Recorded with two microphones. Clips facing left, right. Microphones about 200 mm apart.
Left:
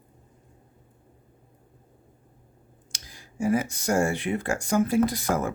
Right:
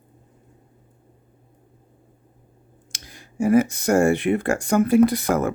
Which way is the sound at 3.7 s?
60° right (ahead or behind).